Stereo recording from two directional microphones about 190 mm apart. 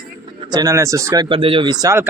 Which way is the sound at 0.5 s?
20° right (ahead or behind).